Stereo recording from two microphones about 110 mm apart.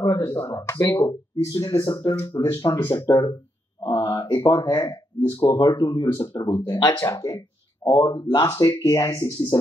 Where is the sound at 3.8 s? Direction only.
45° left (ahead or behind).